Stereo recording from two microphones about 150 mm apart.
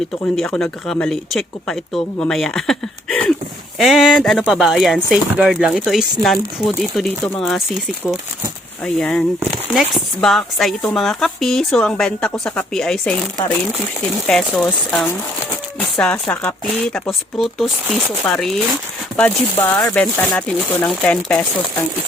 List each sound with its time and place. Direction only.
0.3 s speech: 5° left (ahead or behind)
16.2 s speech: 10° left (ahead or behind)
19.8 s speech: 5° left (ahead or behind)